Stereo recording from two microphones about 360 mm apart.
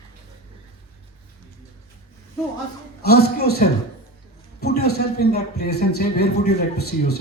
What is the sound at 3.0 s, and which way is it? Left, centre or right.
A man's voice, left.